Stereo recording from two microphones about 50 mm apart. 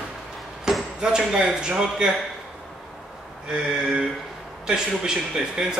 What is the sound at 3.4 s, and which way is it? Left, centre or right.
A man's voice, centre.